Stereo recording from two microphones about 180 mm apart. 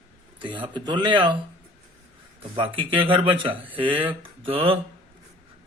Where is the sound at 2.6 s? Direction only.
30° right (ahead or behind).